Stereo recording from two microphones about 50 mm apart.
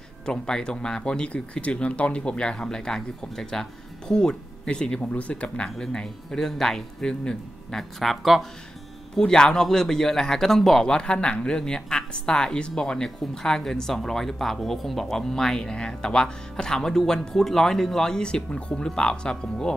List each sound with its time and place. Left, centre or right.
0.2 s speech: centre
5.8 s speech: centre
8.0 s speech: centre
9.1 s speech: centre
10.9 s speech: centre